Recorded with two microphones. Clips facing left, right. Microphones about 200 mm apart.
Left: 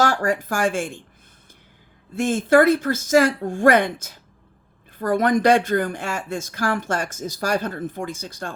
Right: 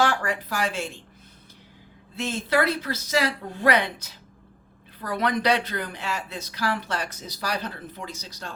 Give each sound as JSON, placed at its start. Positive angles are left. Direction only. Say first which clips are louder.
{"t": 0.0, "sound": "speech", "louder": "left 4 dB", "side_deg": 45}
{"t": 2.1, "sound": "speech", "louder": "left 8 dB", "side_deg": 50}